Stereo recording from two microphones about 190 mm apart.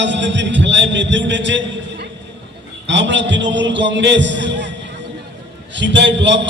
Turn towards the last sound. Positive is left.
turn(degrees=-70)  # may be behind; listen again after turning